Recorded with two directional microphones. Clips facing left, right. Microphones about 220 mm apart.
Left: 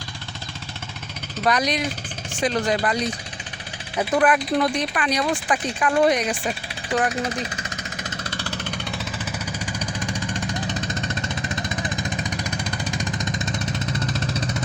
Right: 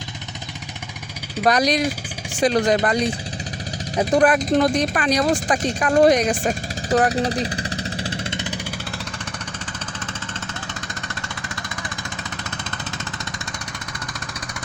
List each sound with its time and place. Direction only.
1.5 s speech: 40° right (ahead or behind)
3.9 s speech: 40° right (ahead or behind)
5.8 s a sound: 45° right (ahead or behind); by 8.6 s 20° right (ahead or behind)
10.1 s vehicle: 15° left (ahead or behind)